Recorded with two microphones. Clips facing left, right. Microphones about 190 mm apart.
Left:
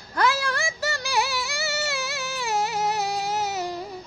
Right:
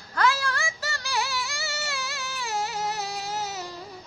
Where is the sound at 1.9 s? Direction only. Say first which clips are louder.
Left 5 dB; 65° left (ahead or behind).